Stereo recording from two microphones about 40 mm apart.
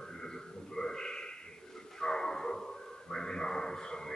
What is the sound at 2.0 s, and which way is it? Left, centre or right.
Bow-wow, centre.